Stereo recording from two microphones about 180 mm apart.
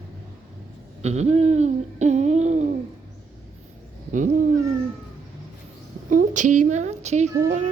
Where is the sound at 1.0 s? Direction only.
40° right (ahead or behind).